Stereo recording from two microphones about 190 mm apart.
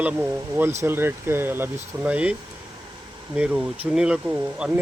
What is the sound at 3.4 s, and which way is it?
Speech, 5° right (ahead or behind).